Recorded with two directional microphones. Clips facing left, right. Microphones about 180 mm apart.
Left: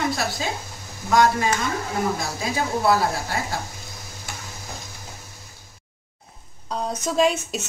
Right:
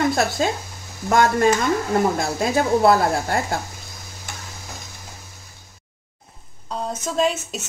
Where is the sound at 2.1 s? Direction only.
55° right (ahead or behind).